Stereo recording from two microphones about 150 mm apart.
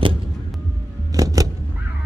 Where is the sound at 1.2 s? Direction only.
25° right (ahead or behind).